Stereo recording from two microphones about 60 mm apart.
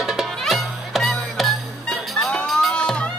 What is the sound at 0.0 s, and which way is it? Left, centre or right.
Music, centre.